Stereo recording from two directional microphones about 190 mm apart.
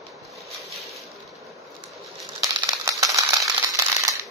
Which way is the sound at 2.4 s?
15° right (ahead or behind).